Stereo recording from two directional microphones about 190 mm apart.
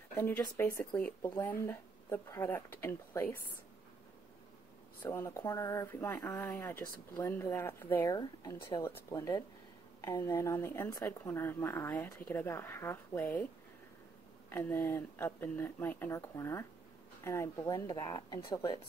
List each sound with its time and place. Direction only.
0.1 s speech: 10° left (ahead or behind)
5.0 s speech: 15° left (ahead or behind)
14.5 s speech: 10° left (ahead or behind)